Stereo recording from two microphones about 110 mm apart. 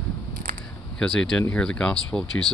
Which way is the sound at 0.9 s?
5° left (ahead or behind).